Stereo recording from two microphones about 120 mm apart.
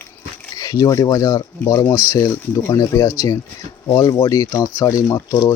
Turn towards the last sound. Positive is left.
turn(degrees=25)  # may be behind; listen again after turning